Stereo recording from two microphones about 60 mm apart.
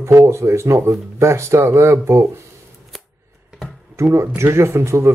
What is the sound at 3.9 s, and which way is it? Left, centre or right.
Speech, right.